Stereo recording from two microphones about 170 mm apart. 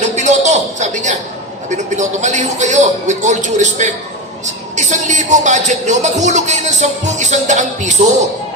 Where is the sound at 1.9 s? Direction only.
45° right (ahead or behind).